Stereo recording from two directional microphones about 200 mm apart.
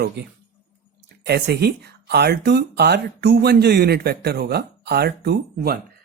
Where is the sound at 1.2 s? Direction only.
55° right (ahead or behind).